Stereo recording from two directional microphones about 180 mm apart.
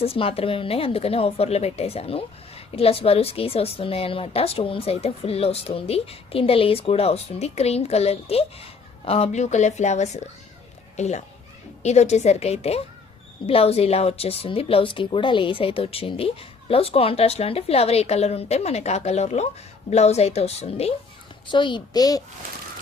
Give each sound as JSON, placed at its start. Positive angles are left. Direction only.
{"t": 0.0, "sound": "a woman's voice", "side_deg": 30}